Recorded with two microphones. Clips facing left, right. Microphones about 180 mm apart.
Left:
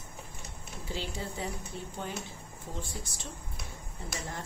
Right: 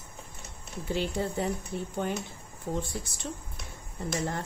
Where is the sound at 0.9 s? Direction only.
55° right (ahead or behind).